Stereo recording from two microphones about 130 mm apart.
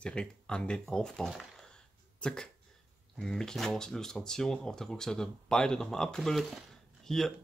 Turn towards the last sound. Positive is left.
turn(degrees=0)  # may be behind; listen again after turning